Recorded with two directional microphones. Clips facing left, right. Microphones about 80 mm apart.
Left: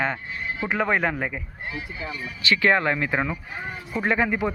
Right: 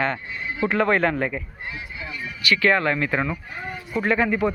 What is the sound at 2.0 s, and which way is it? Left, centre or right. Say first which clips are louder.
Speech: right 2 dB; left.